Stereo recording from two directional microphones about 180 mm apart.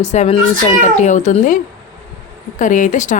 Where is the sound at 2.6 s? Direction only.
45° left (ahead or behind).